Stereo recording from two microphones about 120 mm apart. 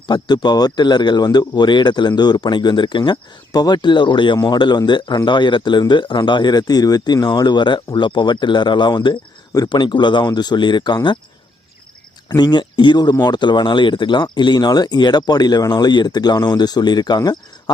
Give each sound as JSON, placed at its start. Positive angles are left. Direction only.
{"t": 0.1, "sound": "speech", "side_deg": 35}
{"t": 12.4, "sound": "speech", "side_deg": 40}